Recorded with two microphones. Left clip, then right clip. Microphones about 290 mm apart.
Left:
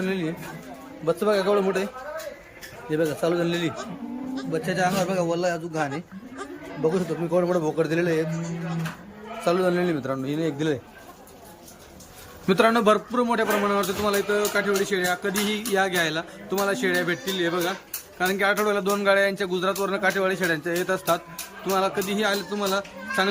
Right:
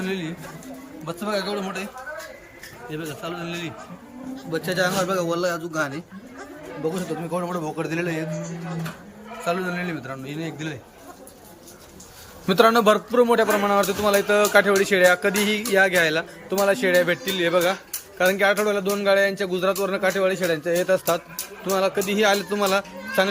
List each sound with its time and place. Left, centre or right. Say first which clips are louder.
0.0 s a man's voice: left 1 dB; centre
2.9 s a man's voice: left 9 dB; left
4.5 s a man's voice: right 1 dB; centre
9.4 s a man's voice: left 3 dB; centre
12.5 s a man's voice: right 3 dB; centre